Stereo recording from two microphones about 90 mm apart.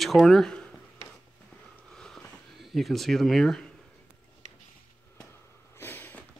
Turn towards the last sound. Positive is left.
turn(degrees=20)  # may be behind; listen again after turning